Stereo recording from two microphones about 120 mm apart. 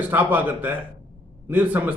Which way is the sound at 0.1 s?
15° right (ahead or behind).